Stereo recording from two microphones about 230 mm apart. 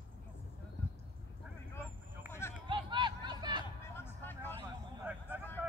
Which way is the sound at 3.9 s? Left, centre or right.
Centre.